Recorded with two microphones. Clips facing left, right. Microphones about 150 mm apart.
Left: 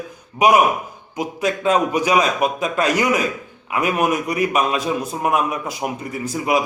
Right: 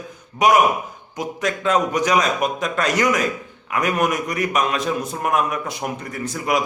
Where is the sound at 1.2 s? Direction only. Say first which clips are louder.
Left 2 dB; 10° left (ahead or behind).